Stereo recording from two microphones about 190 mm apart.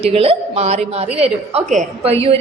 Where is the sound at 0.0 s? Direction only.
30° right (ahead or behind).